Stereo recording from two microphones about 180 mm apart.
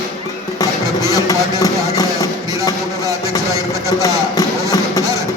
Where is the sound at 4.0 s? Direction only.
20° left (ahead or behind).